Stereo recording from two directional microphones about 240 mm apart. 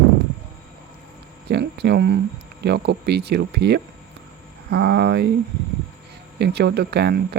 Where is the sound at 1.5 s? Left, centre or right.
Right.